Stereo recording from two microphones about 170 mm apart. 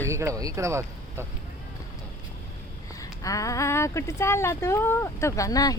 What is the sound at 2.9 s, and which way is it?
Speech, 20° left (ahead or behind).